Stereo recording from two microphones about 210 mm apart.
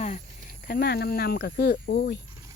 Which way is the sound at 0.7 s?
50° left (ahead or behind).